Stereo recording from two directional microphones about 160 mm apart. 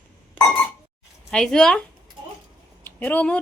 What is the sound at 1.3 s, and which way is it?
Speech, 5° left (ahead or behind).